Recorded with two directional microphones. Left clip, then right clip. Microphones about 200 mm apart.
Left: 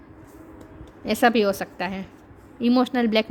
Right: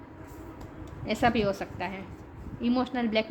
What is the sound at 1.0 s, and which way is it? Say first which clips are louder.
A woman's voice: left 7 dB; 55° left (ahead or behind).